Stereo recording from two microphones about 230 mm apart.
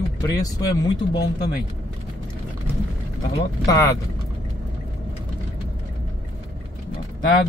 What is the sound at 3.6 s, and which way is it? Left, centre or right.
Speech, centre.